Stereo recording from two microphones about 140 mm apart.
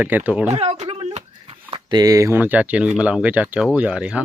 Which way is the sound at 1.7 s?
30° right (ahead or behind).